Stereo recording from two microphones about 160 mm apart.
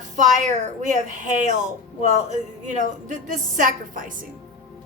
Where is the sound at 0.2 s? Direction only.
50° right (ahead or behind).